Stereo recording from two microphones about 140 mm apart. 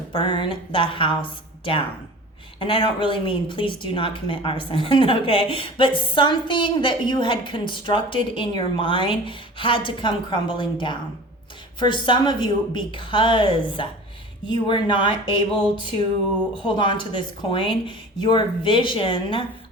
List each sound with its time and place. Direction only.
0.1 s speech: 35° left (ahead or behind)
2.6 s speech: 40° left (ahead or behind)
16.6 s speech: 35° left (ahead or behind)